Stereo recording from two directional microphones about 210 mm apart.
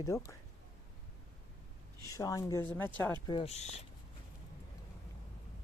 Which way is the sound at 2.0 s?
15° left (ahead or behind).